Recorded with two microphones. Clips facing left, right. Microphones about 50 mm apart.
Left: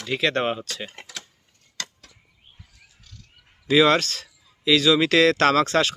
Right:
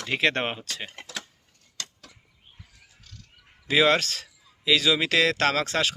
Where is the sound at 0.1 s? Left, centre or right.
Right.